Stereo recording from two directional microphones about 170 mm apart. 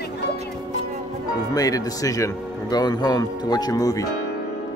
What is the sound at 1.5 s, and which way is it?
Speech, 20° left (ahead or behind).